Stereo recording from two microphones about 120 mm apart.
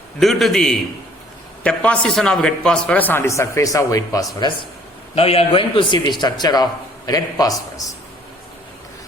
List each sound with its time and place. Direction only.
0.2 s a man's voice: centre (ahead or behind); by 4.3 s 30° left (ahead or behind)
5.1 s a man's voice: 55° left (ahead or behind); by 7.5 s 30° left (ahead or behind)